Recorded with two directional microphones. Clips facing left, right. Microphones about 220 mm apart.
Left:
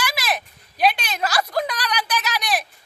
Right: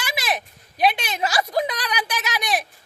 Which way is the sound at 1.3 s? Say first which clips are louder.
Right 1 dB; 20° right (ahead or behind).